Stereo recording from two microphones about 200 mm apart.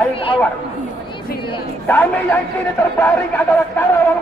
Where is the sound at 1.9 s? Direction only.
10° left (ahead or behind).